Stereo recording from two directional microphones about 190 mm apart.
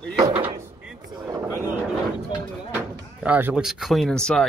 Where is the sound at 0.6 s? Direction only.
10° right (ahead or behind).